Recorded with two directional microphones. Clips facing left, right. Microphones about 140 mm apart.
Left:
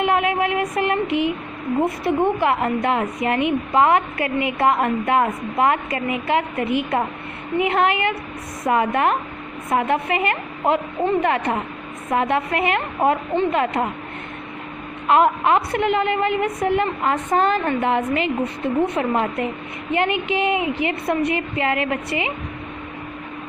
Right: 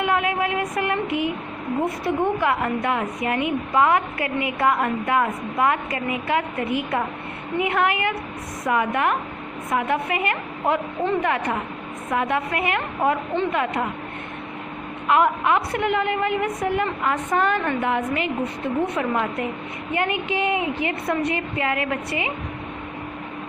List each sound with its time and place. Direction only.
0.0 s a sound: 20° left (ahead or behind)
1.8 s a woman's voice: 25° left (ahead or behind)
15.0 s a woman's voice: 30° left (ahead or behind)
19.9 s a woman's voice: 20° left (ahead or behind)